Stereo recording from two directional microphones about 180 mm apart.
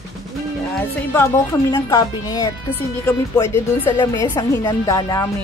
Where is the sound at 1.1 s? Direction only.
15° left (ahead or behind).